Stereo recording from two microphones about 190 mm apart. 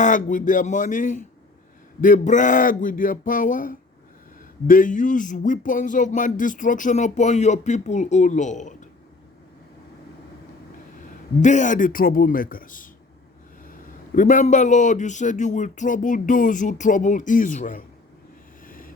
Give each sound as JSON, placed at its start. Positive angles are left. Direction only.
{"t": 0.0, "sound": "speech", "side_deg": 45}
{"t": 11.3, "sound": "speech", "side_deg": 40}
{"t": 14.2, "sound": "speech", "side_deg": 45}
{"t": 18.6, "sound": "vehicle", "side_deg": 45}